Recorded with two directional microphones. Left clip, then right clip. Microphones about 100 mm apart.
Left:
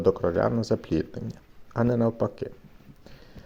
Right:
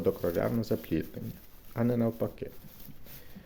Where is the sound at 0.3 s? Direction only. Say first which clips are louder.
Left 6 dB; 25° left (ahead or behind).